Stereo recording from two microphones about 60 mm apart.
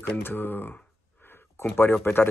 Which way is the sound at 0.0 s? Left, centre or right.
Left.